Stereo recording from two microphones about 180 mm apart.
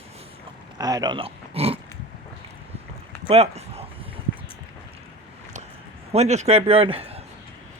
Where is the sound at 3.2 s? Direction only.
35° right (ahead or behind).